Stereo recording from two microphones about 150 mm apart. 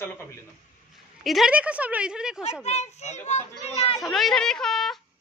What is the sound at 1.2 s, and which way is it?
Speech, centre (ahead or behind).